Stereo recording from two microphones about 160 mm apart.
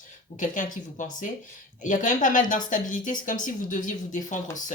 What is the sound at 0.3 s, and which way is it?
Speech, 55° left (ahead or behind).